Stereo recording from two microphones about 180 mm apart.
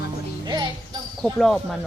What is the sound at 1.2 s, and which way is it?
Speech, centre (ahead or behind).